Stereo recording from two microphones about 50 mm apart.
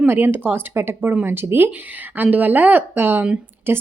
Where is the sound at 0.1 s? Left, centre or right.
Right.